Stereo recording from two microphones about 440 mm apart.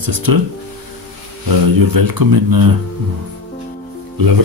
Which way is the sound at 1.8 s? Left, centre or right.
Right.